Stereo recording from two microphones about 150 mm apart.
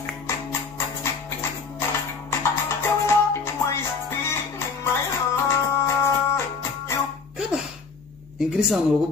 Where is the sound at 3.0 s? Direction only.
15° left (ahead or behind).